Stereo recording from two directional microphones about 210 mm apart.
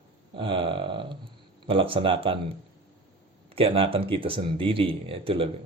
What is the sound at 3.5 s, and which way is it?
Speech, 25° right (ahead or behind).